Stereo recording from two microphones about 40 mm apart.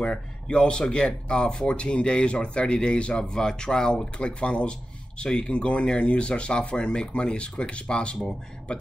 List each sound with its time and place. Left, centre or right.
0.0 s speech: left